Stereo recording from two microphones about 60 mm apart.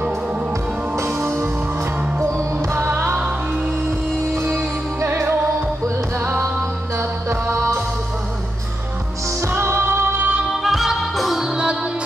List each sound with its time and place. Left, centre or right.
0.9 s music: right
2.7 s music: right
5.0 s music: right
7.0 s music: right
9.5 s music: right
10.5 s music: centre